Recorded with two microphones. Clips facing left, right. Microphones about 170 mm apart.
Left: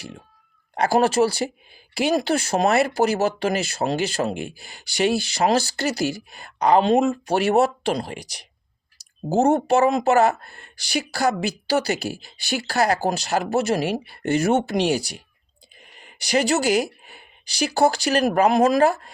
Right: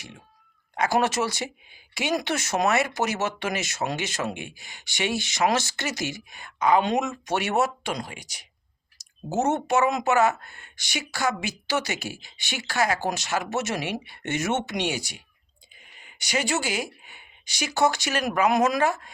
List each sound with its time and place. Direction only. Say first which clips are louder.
0.7 s speech: left 5 dB; 30° left (ahead or behind)